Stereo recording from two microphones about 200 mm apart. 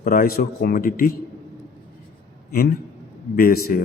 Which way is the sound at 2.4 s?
50° left (ahead or behind).